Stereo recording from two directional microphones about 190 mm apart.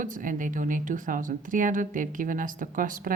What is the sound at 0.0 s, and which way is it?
A woman's voice, 45° right (ahead or behind).